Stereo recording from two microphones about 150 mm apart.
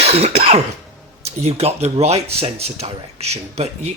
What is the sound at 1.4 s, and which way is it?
Speech, 45° right (ahead or behind).